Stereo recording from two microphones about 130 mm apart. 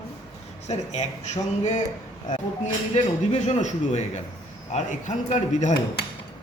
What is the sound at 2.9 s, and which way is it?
A woman's voice, 60° left (ahead or behind).